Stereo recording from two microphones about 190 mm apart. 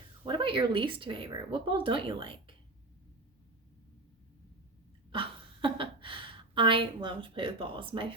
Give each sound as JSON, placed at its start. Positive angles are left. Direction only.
{"t": 0.3, "sound": "speech", "side_deg": -25}
{"t": 5.6, "sound": "a woman's voice", "side_deg": -25}